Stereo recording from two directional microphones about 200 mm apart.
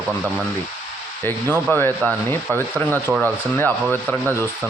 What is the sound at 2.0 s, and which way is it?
Speech, 15° right (ahead or behind).